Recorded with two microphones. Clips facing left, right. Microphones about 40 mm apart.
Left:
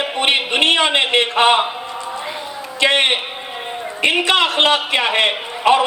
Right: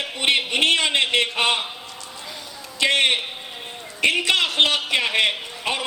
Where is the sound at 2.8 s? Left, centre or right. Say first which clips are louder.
Left 4 dB; left.